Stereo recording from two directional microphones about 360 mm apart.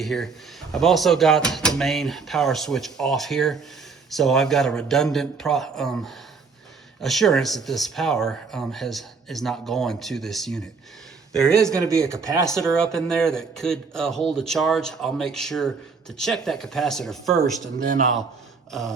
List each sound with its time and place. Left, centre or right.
0.0 s speech: centre
17.8 s a man's voice: right
18.7 s speech: centre